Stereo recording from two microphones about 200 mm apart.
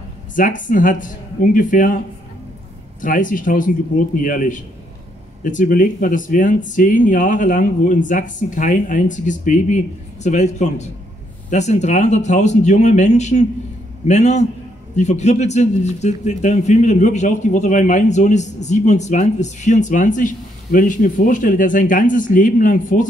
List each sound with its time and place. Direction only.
0.4 s a man's voice: 40° left (ahead or behind)
3.0 s a man's voice: 40° left (ahead or behind)